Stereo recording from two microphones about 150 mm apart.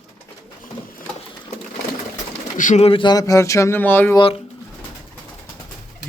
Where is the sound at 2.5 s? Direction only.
60° left (ahead or behind).